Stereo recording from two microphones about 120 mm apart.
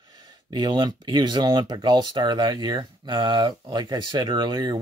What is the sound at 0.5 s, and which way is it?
Speech, 40° right (ahead or behind).